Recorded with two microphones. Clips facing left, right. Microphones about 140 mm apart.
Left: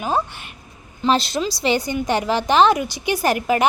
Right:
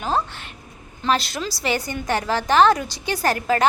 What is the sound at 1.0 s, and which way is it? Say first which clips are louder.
A woman's voice: left 3 dB; 25° left (ahead or behind).